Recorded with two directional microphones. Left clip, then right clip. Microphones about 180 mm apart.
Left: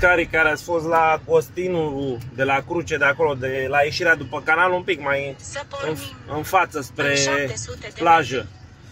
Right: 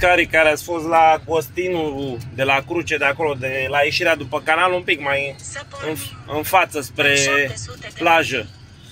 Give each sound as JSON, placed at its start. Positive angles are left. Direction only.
{"t": 0.0, "sound": "speech", "side_deg": 0}
{"t": 5.5, "sound": "speech", "side_deg": 50}
{"t": 6.3, "sound": "speech", "side_deg": 5}